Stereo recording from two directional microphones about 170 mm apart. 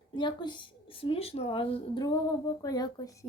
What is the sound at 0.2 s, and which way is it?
A woman's voice, 25° left (ahead or behind).